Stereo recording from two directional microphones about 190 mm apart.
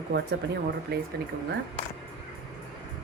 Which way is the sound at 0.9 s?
55° right (ahead or behind).